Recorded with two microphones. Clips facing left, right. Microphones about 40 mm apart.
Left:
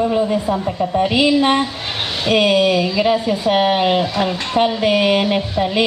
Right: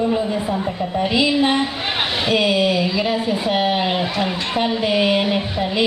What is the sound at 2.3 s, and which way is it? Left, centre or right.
Speech, left.